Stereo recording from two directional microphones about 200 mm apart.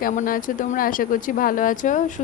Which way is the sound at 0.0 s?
45° left (ahead or behind).